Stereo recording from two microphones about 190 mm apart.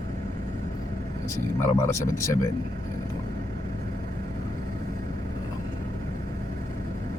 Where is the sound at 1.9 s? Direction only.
15° left (ahead or behind).